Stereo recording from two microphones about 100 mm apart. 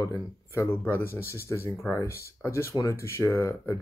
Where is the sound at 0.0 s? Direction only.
30° left (ahead or behind).